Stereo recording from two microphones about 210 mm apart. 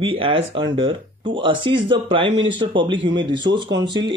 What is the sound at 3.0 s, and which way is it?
Speech, 60° right (ahead or behind).